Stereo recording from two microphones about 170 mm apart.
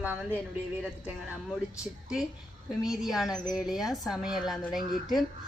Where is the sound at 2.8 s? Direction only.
Centre (ahead or behind).